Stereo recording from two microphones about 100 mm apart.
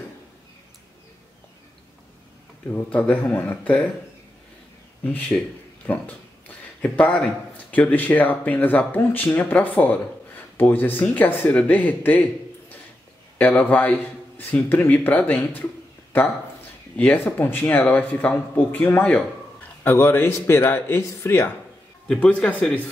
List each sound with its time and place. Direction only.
2.7 s speech: 15° left (ahead or behind)
5.0 s a man's voice: 15° left (ahead or behind)
22.0 s speech: 5° left (ahead or behind)